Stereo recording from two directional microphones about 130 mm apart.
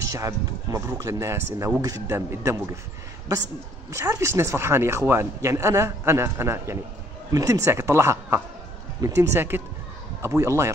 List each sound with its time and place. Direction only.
0.1 s speech: 25° right (ahead or behind)
3.9 s speech: 20° right (ahead or behind)